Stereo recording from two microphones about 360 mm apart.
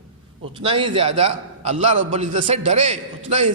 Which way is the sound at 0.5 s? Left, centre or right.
Centre.